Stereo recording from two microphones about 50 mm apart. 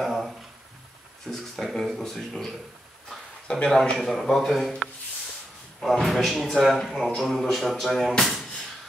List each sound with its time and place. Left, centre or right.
0.0 s a sound: centre
1.2 s speech: centre
1.7 s speech: centre
3.4 s speech: centre
4.0 s speech: centre
8.2 s drawer open or close: centre